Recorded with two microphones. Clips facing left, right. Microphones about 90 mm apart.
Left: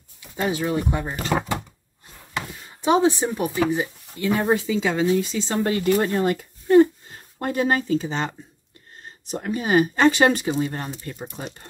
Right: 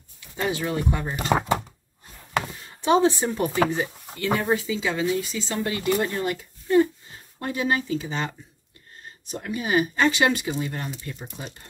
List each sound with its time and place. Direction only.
0.4 s speech: 20° left (ahead or behind)
2.8 s speech: 20° left (ahead or behind)
4.4 s speech: 30° left (ahead or behind)